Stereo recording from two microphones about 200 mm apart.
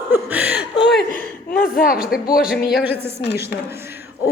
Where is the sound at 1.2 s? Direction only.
45° left (ahead or behind).